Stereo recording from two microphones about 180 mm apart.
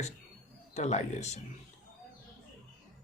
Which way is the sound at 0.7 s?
40° left (ahead or behind).